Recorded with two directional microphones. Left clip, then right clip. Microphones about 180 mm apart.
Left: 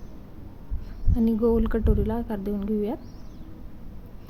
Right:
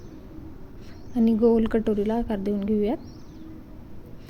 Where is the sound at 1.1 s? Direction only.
5° right (ahead or behind).